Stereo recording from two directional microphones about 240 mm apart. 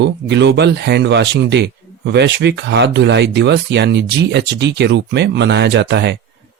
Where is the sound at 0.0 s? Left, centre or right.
Right.